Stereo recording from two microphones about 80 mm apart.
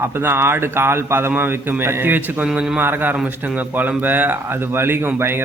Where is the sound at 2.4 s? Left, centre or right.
Centre.